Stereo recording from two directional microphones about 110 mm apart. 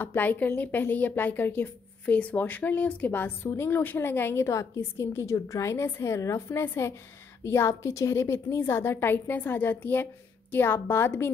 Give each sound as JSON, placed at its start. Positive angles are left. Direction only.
{"t": 0.0, "sound": "a woman's voice", "side_deg": 15}